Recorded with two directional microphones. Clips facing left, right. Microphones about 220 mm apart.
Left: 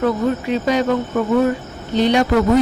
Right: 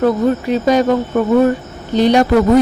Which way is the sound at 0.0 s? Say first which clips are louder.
Right 4 dB; 40° right (ahead or behind).